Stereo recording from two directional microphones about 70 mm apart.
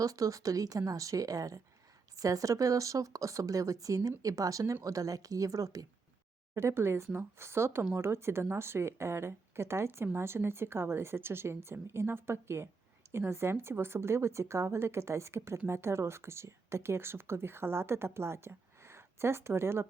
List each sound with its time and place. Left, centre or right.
0.0 s speech: right
6.5 s speech: right